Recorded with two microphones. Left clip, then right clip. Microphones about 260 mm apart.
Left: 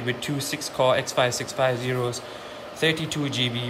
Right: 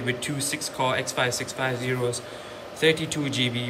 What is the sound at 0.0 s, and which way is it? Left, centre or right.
Speech, centre.